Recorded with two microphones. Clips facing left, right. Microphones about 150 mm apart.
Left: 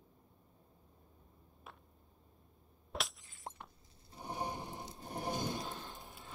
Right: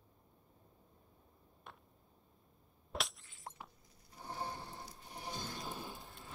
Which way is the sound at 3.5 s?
25° left (ahead or behind).